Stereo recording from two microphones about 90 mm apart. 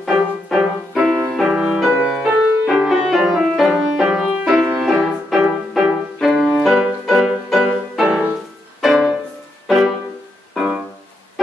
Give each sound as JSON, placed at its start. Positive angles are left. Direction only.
{"t": 0.1, "sound": "music", "side_deg": -5}
{"t": 10.5, "sound": "music", "side_deg": -5}